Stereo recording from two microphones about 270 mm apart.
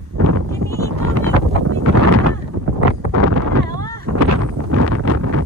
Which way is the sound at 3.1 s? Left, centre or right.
Right.